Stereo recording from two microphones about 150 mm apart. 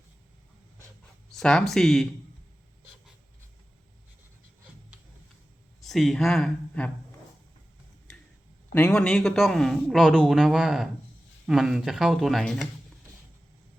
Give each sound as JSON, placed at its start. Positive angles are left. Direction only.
{"t": 1.4, "sound": "a man's voice", "side_deg": 5}
{"t": 5.8, "sound": "a man's voice", "side_deg": 0}
{"t": 8.7, "sound": "a man's voice", "side_deg": 10}